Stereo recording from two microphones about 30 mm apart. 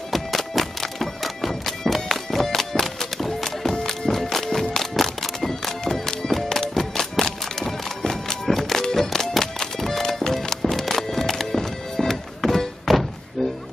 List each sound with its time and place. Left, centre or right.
0.1 s music: centre